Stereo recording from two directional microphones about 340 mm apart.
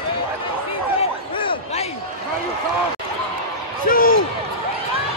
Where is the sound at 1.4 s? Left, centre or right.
Centre.